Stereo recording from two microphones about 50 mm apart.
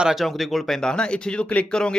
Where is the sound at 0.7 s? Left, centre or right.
Centre.